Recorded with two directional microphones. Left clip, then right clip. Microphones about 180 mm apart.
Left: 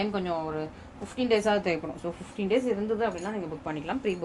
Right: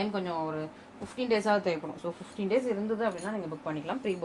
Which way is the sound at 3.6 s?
40° left (ahead or behind).